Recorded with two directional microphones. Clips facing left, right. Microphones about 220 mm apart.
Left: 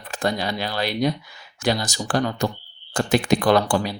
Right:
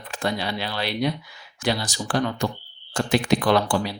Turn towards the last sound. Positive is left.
turn(degrees=45)  # may be behind; listen again after turning